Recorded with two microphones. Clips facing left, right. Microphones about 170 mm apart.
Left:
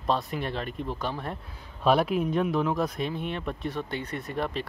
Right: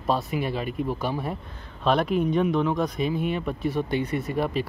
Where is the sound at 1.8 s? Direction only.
5° left (ahead or behind).